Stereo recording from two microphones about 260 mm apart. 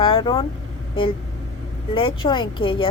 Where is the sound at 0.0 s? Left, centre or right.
Centre.